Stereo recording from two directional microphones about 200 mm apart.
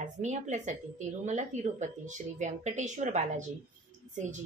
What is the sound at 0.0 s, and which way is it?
A woman's voice, 35° right (ahead or behind).